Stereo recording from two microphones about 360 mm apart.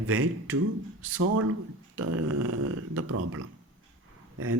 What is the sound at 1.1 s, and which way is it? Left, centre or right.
Speech, right.